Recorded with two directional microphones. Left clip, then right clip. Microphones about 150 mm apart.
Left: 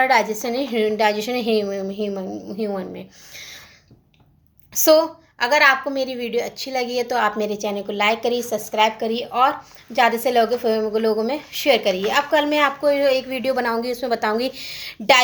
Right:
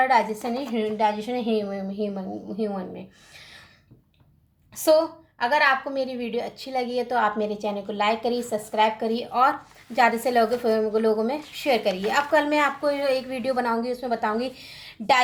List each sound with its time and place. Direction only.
0.0 s a woman's voice: 25° left (ahead or behind)
1.6 s a woman's voice: 15° left (ahead or behind)
4.7 s a woman's voice: 20° left (ahead or behind)